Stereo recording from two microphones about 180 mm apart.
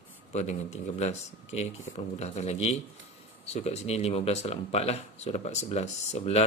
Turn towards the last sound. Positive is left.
turn(degrees=35)  # may be behind; listen again after turning